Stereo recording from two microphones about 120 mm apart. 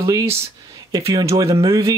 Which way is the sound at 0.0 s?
30° right (ahead or behind).